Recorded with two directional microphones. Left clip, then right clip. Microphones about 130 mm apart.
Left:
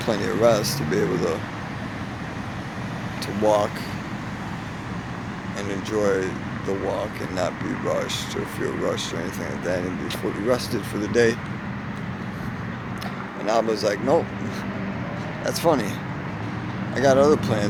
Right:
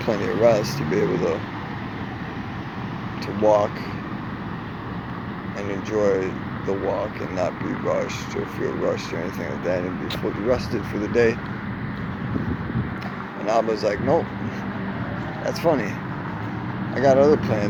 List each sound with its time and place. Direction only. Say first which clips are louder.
0.0 s speech: right 1 dB; 15° left (ahead or behind)
3.4 s speech: right 2 dB; 15° left (ahead or behind)
5.6 s speech: right 2 dB; 15° left (ahead or behind)
10.5 s speech: even; 15° left (ahead or behind)
13.4 s speech: right 1 dB; 20° left (ahead or behind)
15.4 s speech: even; 15° left (ahead or behind)
16.9 s speech: right 1 dB; 15° left (ahead or behind)